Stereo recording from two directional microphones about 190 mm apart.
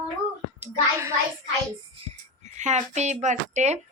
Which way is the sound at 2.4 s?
40° right (ahead or behind).